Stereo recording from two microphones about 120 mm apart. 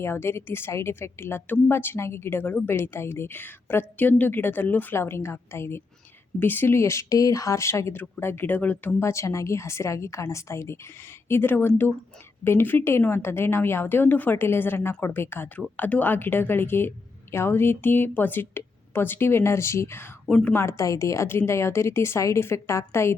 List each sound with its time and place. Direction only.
0.0 s a woman's voice: 20° left (ahead or behind)
20.2 s a woman's voice: 5° left (ahead or behind)
20.5 s a woman's voice: 25° left (ahead or behind)